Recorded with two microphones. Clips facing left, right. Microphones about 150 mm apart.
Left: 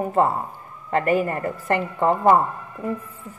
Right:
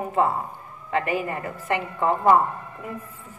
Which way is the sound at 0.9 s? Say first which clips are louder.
Left 5 dB; 45° left (ahead or behind).